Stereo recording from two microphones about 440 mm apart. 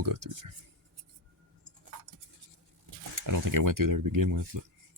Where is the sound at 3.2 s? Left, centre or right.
Right.